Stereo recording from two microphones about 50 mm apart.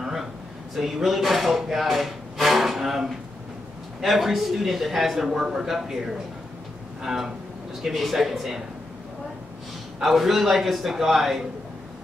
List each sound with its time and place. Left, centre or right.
0.0 s a sound: centre
0.7 s speech: centre
7.0 s speech: centre
9.9 s speech: centre